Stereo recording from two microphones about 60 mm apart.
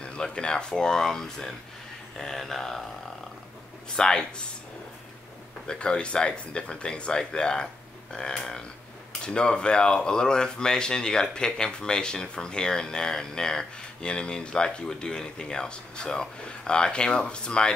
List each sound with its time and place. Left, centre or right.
0.0 s speech: centre
2.1 s a sound: centre
3.9 s speech: centre
5.7 s speech: centre